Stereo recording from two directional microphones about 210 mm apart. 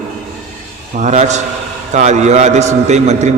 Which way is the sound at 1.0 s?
35° right (ahead or behind).